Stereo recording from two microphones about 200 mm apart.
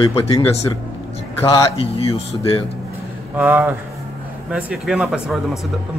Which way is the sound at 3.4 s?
10° right (ahead or behind).